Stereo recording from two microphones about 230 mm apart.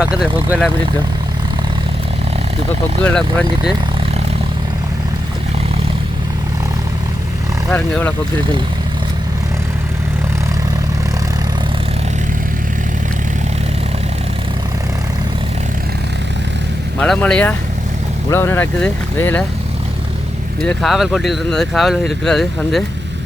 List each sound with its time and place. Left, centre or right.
0.0 s speech: centre
3.0 s speech: centre
7.7 s speech: centre
17.0 s speech: centre
20.6 s speech: centre